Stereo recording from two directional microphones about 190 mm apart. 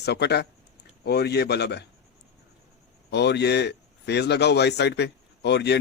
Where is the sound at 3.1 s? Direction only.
60° left (ahead or behind).